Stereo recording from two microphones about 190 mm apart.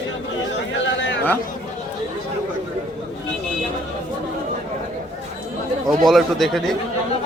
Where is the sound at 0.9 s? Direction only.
75° left (ahead or behind).